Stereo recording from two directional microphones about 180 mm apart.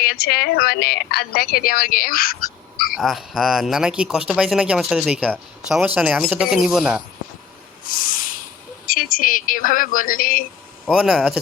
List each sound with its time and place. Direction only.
0.0 s a woman's voice: 55° left (ahead or behind)
2.9 s speech: centre (ahead or behind)
7.9 s a sound: 50° left (ahead or behind)
8.9 s speech: 50° left (ahead or behind)
10.8 s speech: centre (ahead or behind)